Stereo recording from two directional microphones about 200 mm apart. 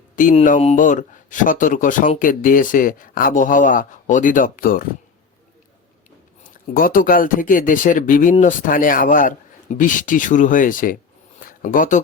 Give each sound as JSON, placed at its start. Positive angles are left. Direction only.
{"t": 0.2, "sound": "speech", "side_deg": 40}
{"t": 6.4, "sound": "speech", "side_deg": 45}
{"t": 11.3, "sound": "a sound", "side_deg": 45}